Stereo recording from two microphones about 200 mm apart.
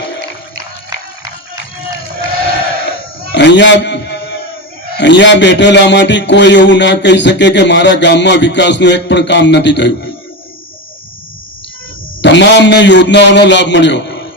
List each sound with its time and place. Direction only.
3.3 s a man's voice: 60° left (ahead or behind)
12.2 s a man's voice: 60° left (ahead or behind)